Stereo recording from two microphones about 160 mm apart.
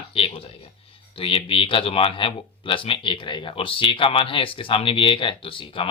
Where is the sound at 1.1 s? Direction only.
35° left (ahead or behind).